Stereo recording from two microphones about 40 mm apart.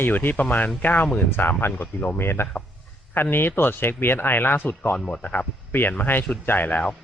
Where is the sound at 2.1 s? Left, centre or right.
Left.